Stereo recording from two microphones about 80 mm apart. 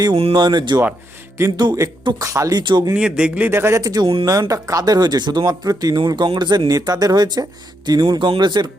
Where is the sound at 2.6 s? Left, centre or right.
Right.